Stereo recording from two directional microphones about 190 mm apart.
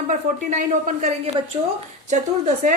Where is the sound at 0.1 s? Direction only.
40° right (ahead or behind).